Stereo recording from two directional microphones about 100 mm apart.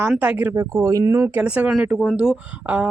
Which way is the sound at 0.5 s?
30° right (ahead or behind).